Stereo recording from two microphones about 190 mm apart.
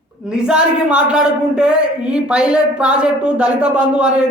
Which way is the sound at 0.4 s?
5° right (ahead or behind).